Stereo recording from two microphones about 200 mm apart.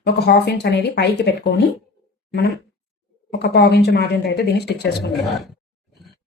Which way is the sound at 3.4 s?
55° left (ahead or behind).